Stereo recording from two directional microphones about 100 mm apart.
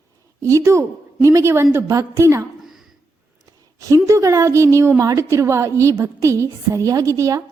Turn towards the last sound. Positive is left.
turn(degrees=-30)  # may be behind; listen again after turning